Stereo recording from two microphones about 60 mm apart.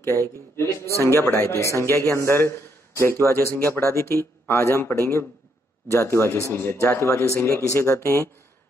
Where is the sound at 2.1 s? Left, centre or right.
Left.